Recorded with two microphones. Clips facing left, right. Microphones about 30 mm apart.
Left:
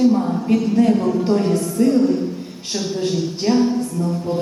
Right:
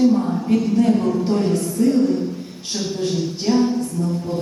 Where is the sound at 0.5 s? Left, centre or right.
Centre.